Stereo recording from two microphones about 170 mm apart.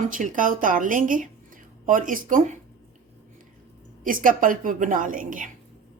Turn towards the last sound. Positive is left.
turn(degrees=-50)  # may be behind; listen again after turning